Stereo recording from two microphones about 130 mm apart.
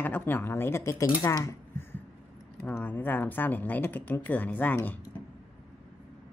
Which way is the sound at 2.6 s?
15° left (ahead or behind).